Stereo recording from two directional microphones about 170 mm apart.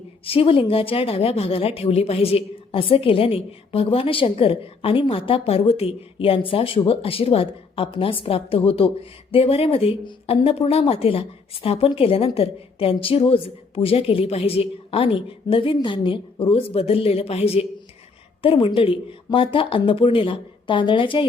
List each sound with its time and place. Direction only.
0.3 s speech: 35° left (ahead or behind)